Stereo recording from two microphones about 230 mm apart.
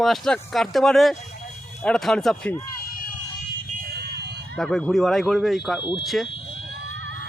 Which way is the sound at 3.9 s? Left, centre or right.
Right.